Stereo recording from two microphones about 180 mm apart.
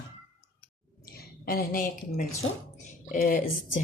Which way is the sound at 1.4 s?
55° left (ahead or behind).